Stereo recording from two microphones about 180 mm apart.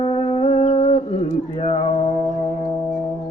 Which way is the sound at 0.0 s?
30° left (ahead or behind).